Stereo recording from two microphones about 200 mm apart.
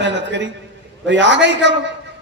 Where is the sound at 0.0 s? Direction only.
60° right (ahead or behind).